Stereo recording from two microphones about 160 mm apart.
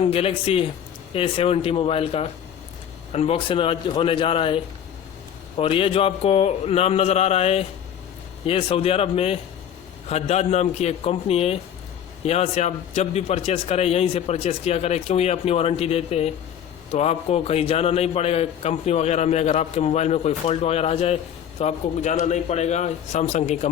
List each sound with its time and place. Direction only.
0.0 s a man's voice: 35° left (ahead or behind)